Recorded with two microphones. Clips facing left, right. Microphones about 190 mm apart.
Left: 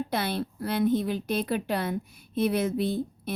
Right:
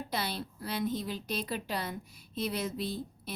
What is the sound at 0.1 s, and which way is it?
A woman's voice, 55° left (ahead or behind).